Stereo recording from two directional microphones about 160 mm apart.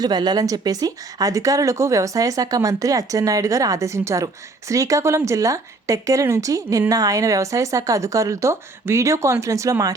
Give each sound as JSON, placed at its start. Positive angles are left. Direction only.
{"t": 0.0, "sound": "speech", "side_deg": -25}